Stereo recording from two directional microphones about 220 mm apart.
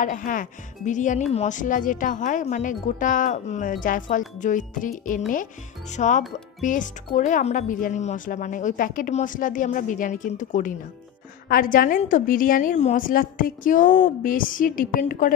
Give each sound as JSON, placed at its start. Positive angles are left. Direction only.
{"t": 0.0, "sound": "a woman's voice", "side_deg": 35}